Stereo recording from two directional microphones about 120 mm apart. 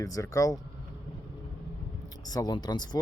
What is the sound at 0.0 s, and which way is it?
Speech, 25° left (ahead or behind).